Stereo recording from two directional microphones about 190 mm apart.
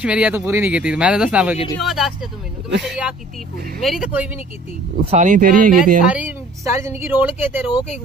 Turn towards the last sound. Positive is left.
turn(degrees=-10)  # may be behind; listen again after turning